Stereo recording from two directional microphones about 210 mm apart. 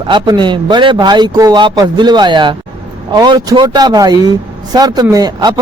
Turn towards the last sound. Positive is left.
turn(degrees=-20)  # may be behind; listen again after turning